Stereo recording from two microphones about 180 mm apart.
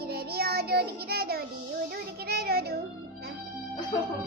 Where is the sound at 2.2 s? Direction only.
60° right (ahead or behind).